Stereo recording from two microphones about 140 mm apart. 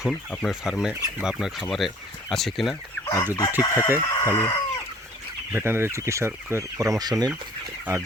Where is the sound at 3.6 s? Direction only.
20° left (ahead or behind).